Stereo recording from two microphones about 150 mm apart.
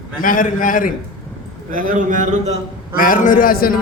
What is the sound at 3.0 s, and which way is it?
Speech, 65° left (ahead or behind).